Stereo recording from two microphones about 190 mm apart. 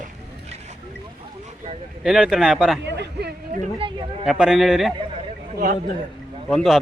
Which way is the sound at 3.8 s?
30° right (ahead or behind).